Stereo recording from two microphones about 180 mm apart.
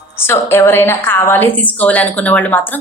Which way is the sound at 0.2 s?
15° left (ahead or behind).